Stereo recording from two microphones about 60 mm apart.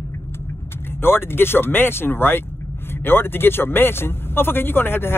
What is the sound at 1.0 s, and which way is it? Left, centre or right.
Speech, left.